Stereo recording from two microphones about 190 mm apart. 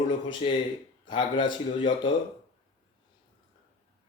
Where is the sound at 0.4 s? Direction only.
30° left (ahead or behind).